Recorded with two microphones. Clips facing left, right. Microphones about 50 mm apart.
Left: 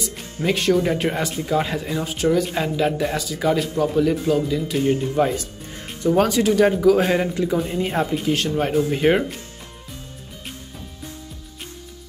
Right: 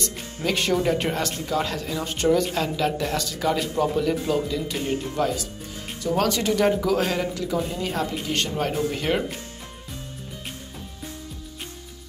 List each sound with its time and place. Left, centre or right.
0.6 s speech: centre
2.0 s speech: centre
2.5 s speech: centre
4.8 s speech: left
6.3 s speech: centre
7.1 s speech: left
8.1 s speech: centre